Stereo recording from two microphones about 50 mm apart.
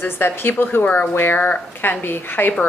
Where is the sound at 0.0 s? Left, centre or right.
Left.